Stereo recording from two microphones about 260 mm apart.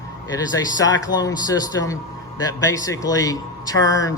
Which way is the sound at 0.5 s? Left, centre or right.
Centre.